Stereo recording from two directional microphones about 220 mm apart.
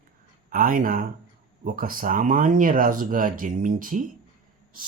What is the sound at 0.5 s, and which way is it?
Speech, 40° right (ahead or behind).